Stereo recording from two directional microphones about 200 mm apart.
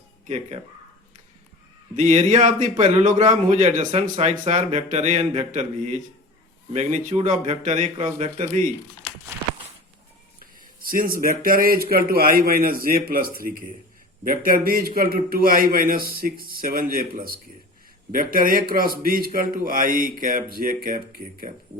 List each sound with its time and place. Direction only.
0.3 s a man's voice: 35° right (ahead or behind)
2.0 s a man's voice: 35° right (ahead or behind)
10.8 s a man's voice: 45° right (ahead or behind)